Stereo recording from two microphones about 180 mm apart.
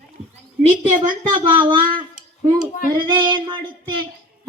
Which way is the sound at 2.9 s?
25° right (ahead or behind).